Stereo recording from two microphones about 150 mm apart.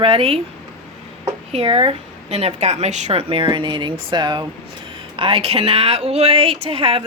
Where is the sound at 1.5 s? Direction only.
35° right (ahead or behind).